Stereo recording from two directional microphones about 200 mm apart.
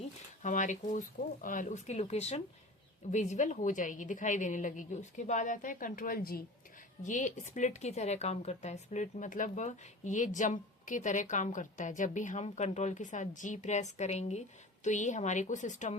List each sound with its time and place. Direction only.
0.4 s speech: 40° left (ahead or behind)